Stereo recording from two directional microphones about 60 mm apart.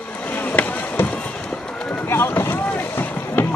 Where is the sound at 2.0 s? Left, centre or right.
Left.